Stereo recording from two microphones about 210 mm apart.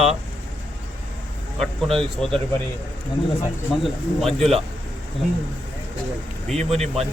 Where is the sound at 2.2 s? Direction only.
5° left (ahead or behind).